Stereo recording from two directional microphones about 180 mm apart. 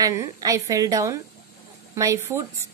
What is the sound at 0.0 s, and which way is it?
A woman's voice, 20° right (ahead or behind).